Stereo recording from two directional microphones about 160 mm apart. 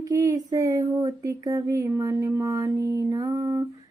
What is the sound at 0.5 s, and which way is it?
Speech, 20° right (ahead or behind).